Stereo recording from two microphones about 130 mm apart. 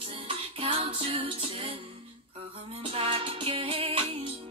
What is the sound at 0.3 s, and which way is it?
Music, 45° right (ahead or behind).